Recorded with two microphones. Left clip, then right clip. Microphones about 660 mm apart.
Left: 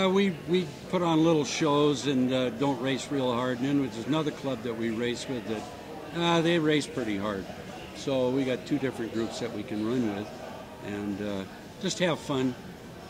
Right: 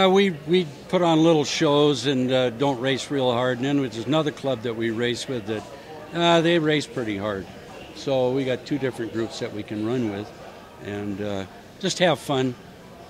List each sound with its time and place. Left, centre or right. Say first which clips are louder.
0.0 s a man's voice: right 7 dB; right